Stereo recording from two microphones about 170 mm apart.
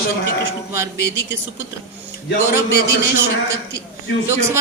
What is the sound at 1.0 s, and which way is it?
Speech, 75° left (ahead or behind).